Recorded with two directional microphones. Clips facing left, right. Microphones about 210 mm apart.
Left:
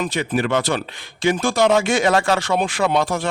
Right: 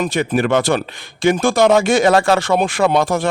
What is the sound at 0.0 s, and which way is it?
A man's voice, 45° right (ahead or behind).